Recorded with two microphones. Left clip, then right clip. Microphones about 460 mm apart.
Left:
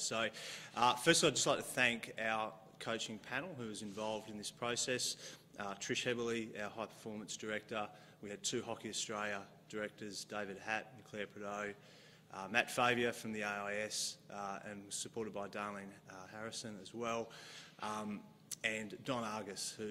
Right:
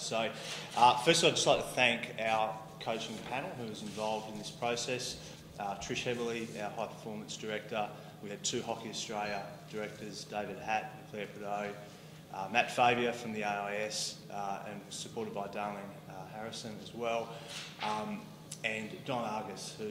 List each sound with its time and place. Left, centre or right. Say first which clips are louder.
0.0 s a man's voice: right 4 dB; left
18.6 s a man's voice: right 3 dB; left